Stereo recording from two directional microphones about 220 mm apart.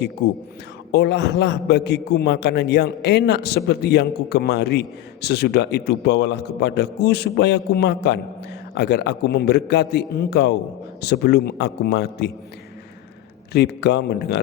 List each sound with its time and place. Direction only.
0.2 s a man's voice: 45° left (ahead or behind)
13.5 s a man's voice: 50° left (ahead or behind)